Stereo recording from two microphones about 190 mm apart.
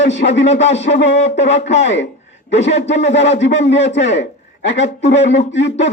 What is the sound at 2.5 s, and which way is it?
Speech, 35° left (ahead or behind).